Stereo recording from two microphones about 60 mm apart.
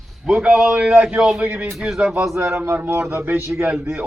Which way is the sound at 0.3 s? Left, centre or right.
Centre.